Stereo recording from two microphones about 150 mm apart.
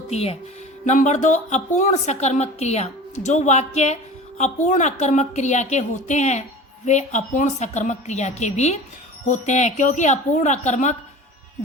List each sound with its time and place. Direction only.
0.1 s a woman's voice: 45° left (ahead or behind)